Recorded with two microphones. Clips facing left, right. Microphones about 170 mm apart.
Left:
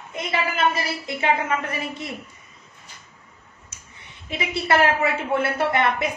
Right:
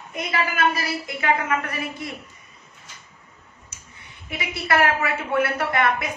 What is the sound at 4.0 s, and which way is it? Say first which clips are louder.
A woman's voice: left 3 dB; 25° left (ahead or behind).